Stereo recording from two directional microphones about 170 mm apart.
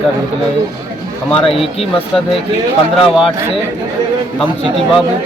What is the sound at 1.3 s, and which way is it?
Speech, 35° left (ahead or behind).